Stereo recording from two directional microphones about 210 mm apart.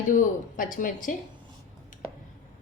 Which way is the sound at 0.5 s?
40° left (ahead or behind).